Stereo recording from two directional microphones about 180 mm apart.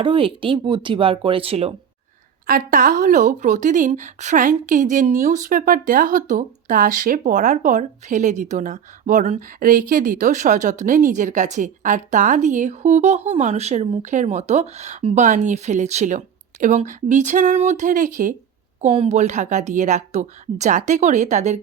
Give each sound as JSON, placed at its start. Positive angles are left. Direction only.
{"t": 0.0, "sound": "speech", "side_deg": -30}
{"t": 2.5, "sound": "speech", "side_deg": -50}
{"t": 18.8, "sound": "a woman's voice", "side_deg": -35}